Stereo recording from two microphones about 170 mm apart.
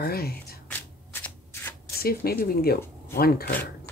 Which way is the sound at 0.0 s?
65° left (ahead or behind).